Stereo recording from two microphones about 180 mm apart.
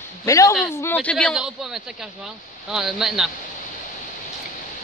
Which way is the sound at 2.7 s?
Centre (ahead or behind).